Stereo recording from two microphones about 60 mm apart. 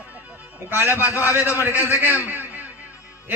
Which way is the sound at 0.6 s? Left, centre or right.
Right.